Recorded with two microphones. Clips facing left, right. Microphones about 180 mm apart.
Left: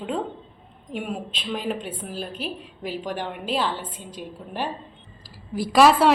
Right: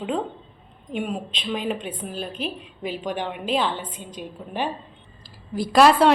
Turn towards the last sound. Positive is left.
turn(degrees=0)  # may be behind; listen again after turning